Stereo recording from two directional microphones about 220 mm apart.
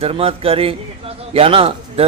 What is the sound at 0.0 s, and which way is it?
Speech, 25° right (ahead or behind).